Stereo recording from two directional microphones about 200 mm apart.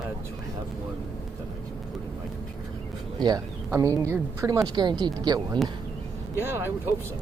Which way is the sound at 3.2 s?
20° right (ahead or behind).